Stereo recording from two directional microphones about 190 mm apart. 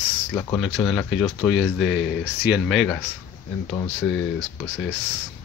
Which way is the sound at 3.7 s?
15° left (ahead or behind).